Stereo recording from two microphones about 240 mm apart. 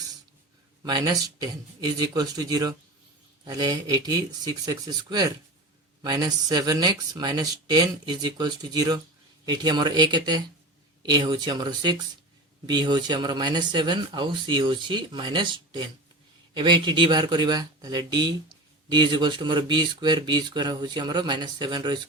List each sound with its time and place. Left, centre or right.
0.8 s speech: centre